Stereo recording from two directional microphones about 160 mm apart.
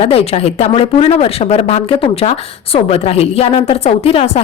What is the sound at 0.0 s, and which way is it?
Speech, 40° left (ahead or behind).